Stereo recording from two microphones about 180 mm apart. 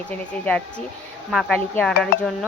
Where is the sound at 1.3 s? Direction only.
Centre (ahead or behind).